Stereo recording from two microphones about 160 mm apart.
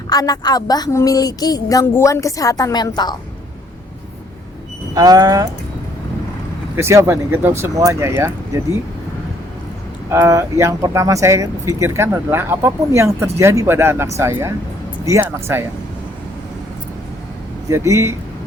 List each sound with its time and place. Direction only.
0.1 s speech: 25° left (ahead or behind)
4.9 s speech: 25° right (ahead or behind)
6.7 s speech: 15° right (ahead or behind)
10.1 s speech: 15° right (ahead or behind)
17.7 s speech: 20° right (ahead or behind)